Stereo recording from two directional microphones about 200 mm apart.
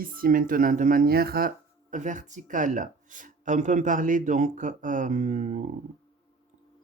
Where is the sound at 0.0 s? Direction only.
45° right (ahead or behind).